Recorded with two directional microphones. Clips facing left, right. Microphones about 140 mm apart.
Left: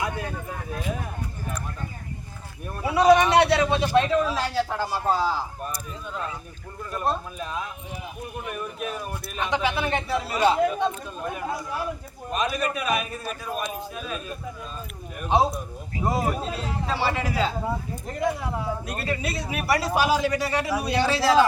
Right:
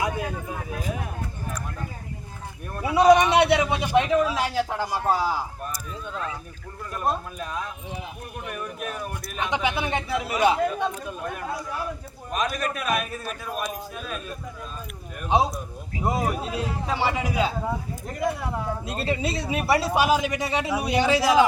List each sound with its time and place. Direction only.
2.8 s a man's voice: 15° right (ahead or behind)
7.3 s a man's voice: centre (ahead or behind)
9.4 s a man's voice: 15° right (ahead or behind)
11.2 s a man's voice: 5° left (ahead or behind)
16.0 s a man's voice: 10° right (ahead or behind)
18.1 s a man's voice: centre (ahead or behind)
18.9 s a man's voice: 25° right (ahead or behind)